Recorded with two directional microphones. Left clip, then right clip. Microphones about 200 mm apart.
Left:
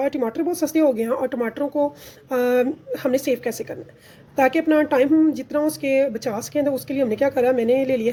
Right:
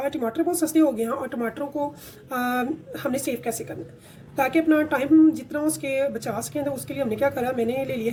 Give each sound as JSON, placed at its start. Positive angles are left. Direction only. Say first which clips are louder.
{"t": 0.0, "sound": "a woman's voice", "louder": "left 3 dB", "side_deg": 40}